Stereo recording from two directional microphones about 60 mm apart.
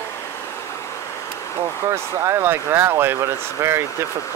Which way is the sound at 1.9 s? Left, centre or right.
Right.